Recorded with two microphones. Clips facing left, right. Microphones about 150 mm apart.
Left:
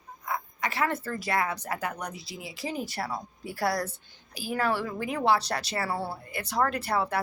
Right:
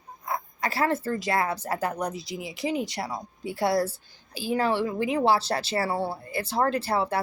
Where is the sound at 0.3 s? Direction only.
35° right (ahead or behind).